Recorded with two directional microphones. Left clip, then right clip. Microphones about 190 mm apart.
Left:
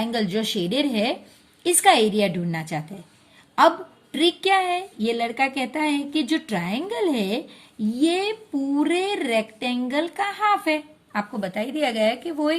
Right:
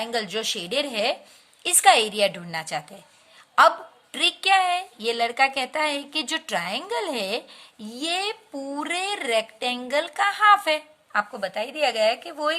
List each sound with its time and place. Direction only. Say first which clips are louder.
0.0 s speech: left 1 dB; 25° right (ahead or behind)
4.1 s speech: even; 25° right (ahead or behind)
11.3 s speech: even; 10° right (ahead or behind)